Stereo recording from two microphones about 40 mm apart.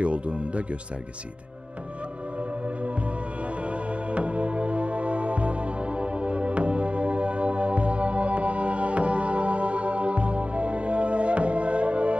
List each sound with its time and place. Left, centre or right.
0.0 s speech: right
3.6 s music: right